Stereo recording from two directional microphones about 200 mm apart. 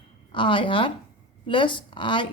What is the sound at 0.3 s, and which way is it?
Speech, 25° left (ahead or behind).